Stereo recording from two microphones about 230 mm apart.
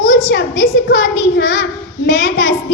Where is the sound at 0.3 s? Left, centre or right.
Left.